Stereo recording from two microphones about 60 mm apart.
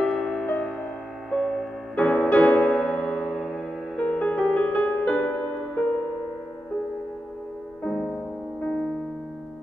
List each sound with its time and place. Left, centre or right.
0.2 s music: left
1.3 s music: centre
2.0 s music: left
3.3 s music: centre
3.9 s music: centre
7.8 s music: centre